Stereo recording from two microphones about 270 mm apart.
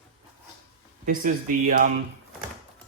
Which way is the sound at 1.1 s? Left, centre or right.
Right.